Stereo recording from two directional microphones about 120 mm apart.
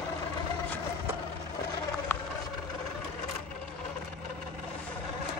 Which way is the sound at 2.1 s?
15° left (ahead or behind).